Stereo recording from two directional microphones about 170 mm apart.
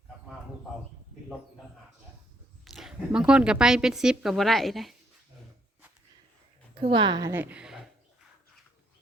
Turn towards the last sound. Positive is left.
turn(degrees=-5)  # may be behind; listen again after turning